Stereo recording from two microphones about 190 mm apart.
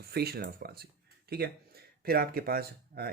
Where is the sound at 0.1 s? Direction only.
55° right (ahead or behind).